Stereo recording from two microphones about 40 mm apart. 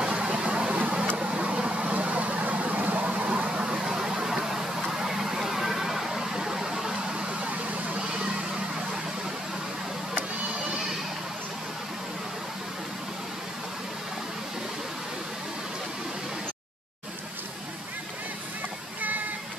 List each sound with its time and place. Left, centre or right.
0.0 s vehicle: right